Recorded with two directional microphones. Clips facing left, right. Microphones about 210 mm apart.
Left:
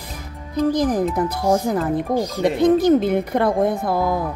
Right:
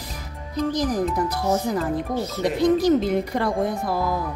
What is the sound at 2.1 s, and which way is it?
Speech, 15° left (ahead or behind).